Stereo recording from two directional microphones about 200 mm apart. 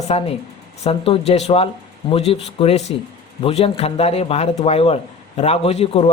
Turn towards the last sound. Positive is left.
turn(degrees=30)  # may be behind; listen again after turning